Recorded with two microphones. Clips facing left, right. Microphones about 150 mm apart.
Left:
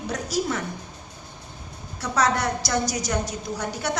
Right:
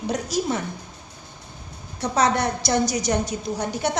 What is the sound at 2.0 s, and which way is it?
A woman's voice, 25° right (ahead or behind).